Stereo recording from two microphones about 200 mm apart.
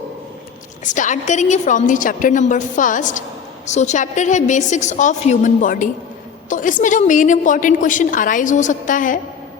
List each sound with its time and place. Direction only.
0.9 s a woman's voice: 40° left (ahead or behind)